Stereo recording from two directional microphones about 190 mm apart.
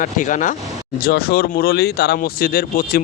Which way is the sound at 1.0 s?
55° left (ahead or behind).